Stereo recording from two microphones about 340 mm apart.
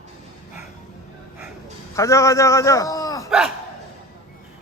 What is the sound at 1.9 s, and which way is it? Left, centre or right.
A man's voice, centre.